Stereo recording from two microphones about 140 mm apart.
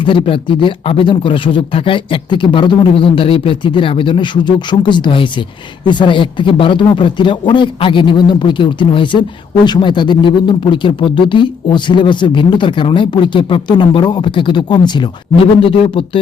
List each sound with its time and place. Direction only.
0.0 s speech: 40° left (ahead or behind)